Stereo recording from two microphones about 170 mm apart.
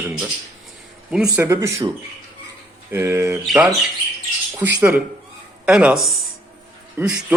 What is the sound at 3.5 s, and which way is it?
Speech, 5° right (ahead or behind).